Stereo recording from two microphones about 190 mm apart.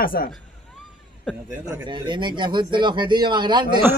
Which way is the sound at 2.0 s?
25° right (ahead or behind).